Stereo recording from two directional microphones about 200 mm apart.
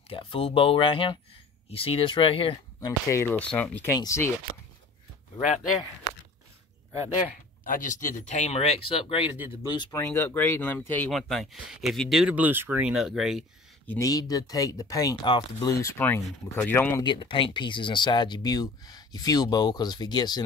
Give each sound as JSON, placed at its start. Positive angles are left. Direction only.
{"t": 0.1, "sound": "speech", "side_deg": 25}
{"t": 3.1, "sound": "speech", "side_deg": 10}
{"t": 7.6, "sound": "speech", "side_deg": 40}
{"t": 13.8, "sound": "speech", "side_deg": 15}
{"t": 17.0, "sound": "speech", "side_deg": 25}